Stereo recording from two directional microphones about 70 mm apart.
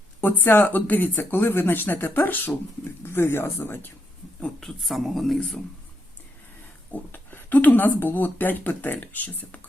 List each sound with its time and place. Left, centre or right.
0.2 s speech: left
4.4 s a woman's voice: centre
6.9 s speech: left